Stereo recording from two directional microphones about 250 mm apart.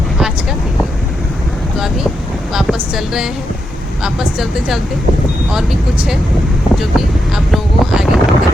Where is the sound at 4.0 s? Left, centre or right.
Centre.